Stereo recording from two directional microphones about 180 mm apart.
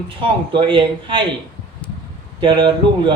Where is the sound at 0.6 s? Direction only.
30° right (ahead or behind).